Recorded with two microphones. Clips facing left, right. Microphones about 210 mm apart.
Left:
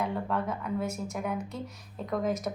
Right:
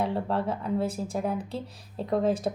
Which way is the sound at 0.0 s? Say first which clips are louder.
Right 3 dB; 30° right (ahead or behind).